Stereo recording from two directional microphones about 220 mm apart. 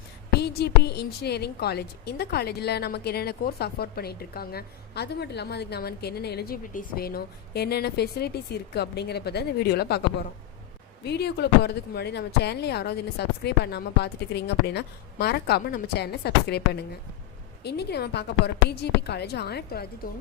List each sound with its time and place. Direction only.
0.3 s a woman's voice: 50° left (ahead or behind)
11.0 s a woman's voice: 50° left (ahead or behind)